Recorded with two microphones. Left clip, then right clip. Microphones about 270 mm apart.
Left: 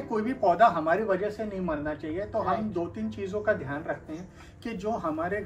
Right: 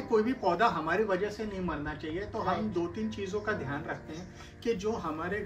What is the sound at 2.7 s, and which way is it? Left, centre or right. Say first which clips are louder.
Speech: left 1 dB; centre.